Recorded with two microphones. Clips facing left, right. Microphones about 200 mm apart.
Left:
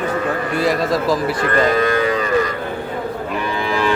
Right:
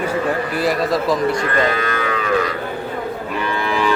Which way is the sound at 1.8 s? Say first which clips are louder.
Left 5 dB; 35° left (ahead or behind).